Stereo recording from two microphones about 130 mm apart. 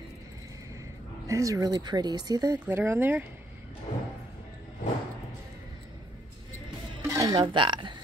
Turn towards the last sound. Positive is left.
turn(degrees=-40)  # may be behind; listen again after turning